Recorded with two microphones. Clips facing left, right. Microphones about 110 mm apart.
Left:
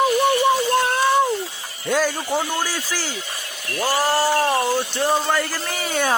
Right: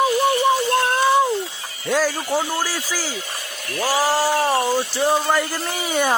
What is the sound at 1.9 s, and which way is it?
Speech, centre (ahead or behind).